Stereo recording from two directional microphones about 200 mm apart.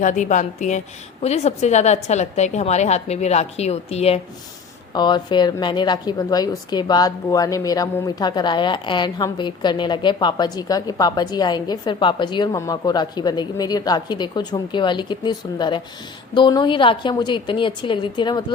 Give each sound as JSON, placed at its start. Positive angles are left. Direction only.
{"t": 0.0, "sound": "a woman's voice", "side_deg": 40}